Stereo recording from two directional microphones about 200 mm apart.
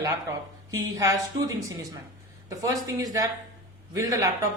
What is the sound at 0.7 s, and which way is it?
A woman's voice, 15° right (ahead or behind).